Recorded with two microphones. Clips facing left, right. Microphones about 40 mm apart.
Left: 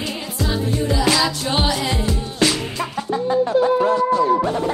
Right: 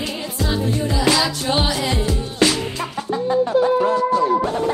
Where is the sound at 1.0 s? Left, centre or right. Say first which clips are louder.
Right 2 dB; centre.